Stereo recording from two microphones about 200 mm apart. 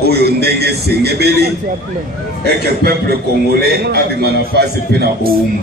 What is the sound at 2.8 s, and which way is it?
Speech, 50° right (ahead or behind).